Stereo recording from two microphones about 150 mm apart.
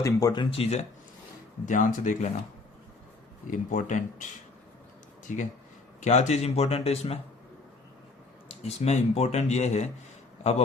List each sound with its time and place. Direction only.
0.0 s speech: 25° left (ahead or behind)
0.5 s speech: 45° left (ahead or behind)
1.6 s speech: 60° left (ahead or behind)
3.4 s speech: 60° left (ahead or behind)
5.3 s speech: 55° left (ahead or behind)
8.6 s speech: 45° left (ahead or behind)